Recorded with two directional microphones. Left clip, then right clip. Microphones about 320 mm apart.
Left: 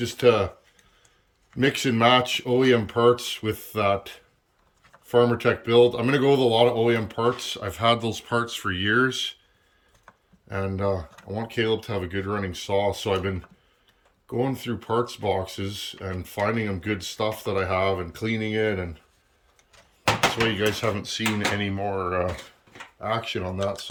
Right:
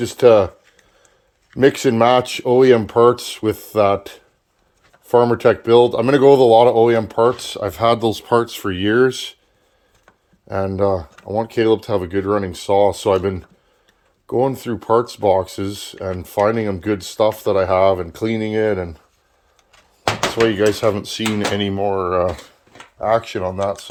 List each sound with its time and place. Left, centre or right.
0.0 s speech: centre
1.5 s speech: centre
10.5 s speech: centre
20.3 s speech: centre